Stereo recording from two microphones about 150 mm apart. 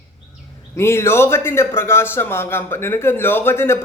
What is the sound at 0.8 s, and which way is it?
A man's voice, 15° left (ahead or behind).